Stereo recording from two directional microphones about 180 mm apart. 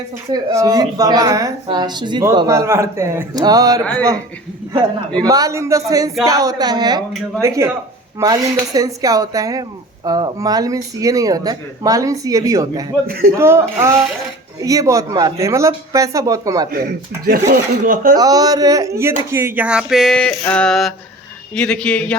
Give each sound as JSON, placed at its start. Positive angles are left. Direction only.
{"t": 0.3, "sound": "speech", "side_deg": -15}
{"t": 5.3, "sound": "speech", "side_deg": -20}
{"t": 13.1, "sound": "speech", "side_deg": -55}
{"t": 13.3, "sound": "speech", "side_deg": -15}
{"t": 16.7, "sound": "speech", "side_deg": -55}
{"t": 18.2, "sound": "speech", "side_deg": -20}